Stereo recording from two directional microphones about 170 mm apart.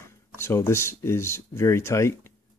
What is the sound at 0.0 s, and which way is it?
Speech, 15° left (ahead or behind).